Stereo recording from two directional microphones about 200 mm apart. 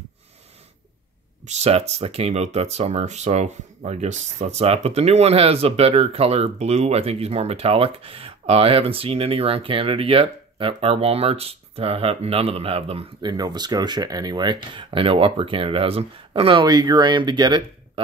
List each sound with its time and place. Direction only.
1.4 s speech: 35° right (ahead or behind)